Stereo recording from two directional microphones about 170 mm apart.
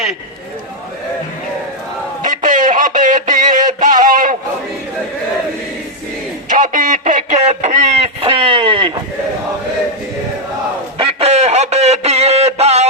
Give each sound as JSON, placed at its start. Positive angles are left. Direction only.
{"t": 2.2, "sound": "music", "side_deg": -50}
{"t": 6.5, "sound": "radio", "side_deg": -50}
{"t": 10.9, "sound": "a sound", "side_deg": -35}